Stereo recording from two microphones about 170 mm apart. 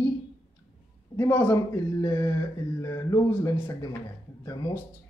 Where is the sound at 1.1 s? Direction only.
15° left (ahead or behind).